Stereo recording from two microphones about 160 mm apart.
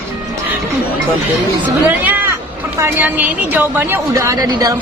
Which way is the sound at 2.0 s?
10° right (ahead or behind).